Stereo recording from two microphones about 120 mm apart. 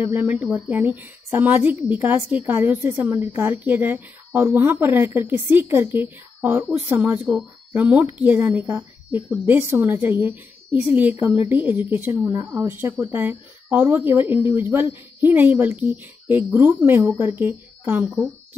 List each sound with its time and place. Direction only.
0.0 s a woman's voice: 15° right (ahead or behind)
12.3 s a woman's voice: 25° right (ahead or behind)